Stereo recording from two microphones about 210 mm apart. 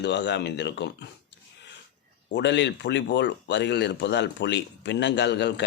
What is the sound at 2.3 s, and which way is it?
Speech, 55° left (ahead or behind).